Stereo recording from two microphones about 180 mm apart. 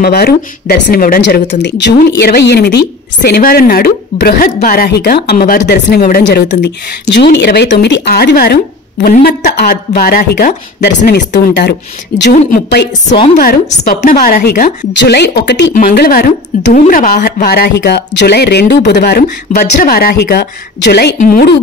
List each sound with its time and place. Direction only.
0.0 s speech: 60° left (ahead or behind)
11.1 s speech: 70° left (ahead or behind)
13.4 s speech: 50° left (ahead or behind); by 15.7 s 70° left (ahead or behind)
15.9 s speech: 55° left (ahead or behind)
21.2 s speech: 55° left (ahead or behind)